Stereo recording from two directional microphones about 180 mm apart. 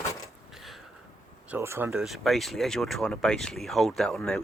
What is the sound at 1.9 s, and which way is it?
Speech, centre (ahead or behind).